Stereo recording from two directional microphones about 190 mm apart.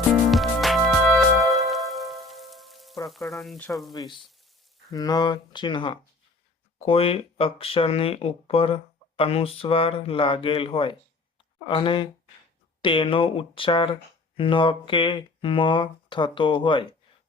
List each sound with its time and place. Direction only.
0.1 s music: centre (ahead or behind)
3.4 s frying: centre (ahead or behind)
3.9 s speech: 20° left (ahead or behind)